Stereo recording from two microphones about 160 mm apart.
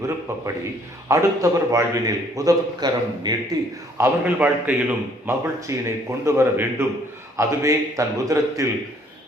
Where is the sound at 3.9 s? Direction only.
15° right (ahead or behind).